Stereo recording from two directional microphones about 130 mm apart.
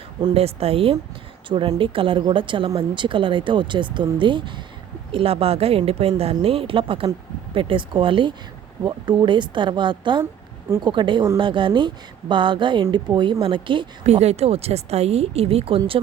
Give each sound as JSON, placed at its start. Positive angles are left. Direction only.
{"t": 0.3, "sound": "a woman's voice", "side_deg": -50}
{"t": 14.0, "sound": "a woman's voice", "side_deg": -55}